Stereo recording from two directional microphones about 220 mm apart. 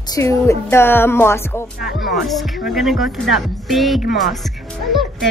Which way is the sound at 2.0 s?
Centre (ahead or behind).